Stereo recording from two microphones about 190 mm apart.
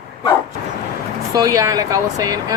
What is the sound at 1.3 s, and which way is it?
Speech, 20° right (ahead or behind).